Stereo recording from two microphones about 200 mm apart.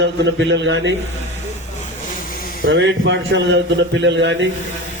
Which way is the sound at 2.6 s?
65° right (ahead or behind).